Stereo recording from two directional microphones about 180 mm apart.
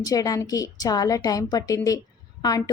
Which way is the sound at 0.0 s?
20° left (ahead or behind).